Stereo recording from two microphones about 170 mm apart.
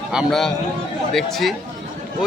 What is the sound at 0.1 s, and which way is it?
A man's voice, centre (ahead or behind).